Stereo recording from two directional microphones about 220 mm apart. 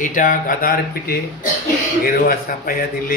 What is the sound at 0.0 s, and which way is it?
Speech, 35° left (ahead or behind).